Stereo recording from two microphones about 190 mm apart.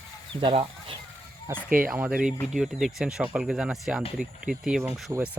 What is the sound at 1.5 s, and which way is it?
Speech, 15° right (ahead or behind).